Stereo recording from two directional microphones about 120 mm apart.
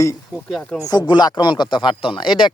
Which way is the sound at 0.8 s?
35° left (ahead or behind).